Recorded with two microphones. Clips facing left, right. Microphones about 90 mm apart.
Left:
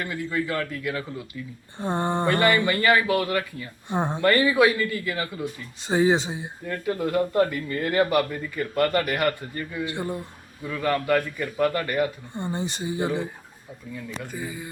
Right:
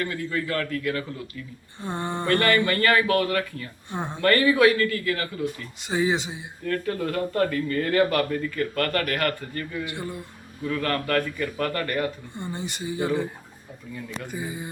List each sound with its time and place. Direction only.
0.0 s speech: 15° left (ahead or behind)
1.8 s speech: 35° left (ahead or behind)
2.2 s speech: 15° left (ahead or behind)
3.8 s speech: 35° left (ahead or behind)
4.2 s speech: 15° left (ahead or behind)
5.9 s speech: 35° left (ahead or behind)
6.7 s speech: 15° left (ahead or behind)
9.8 s speech: 30° left (ahead or behind)
10.7 s speech: 10° left (ahead or behind)
12.4 s speech: 30° left (ahead or behind)
14.4 s speech: 25° right (ahead or behind)